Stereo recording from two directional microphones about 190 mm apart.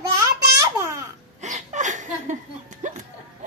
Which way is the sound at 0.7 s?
15° right (ahead or behind).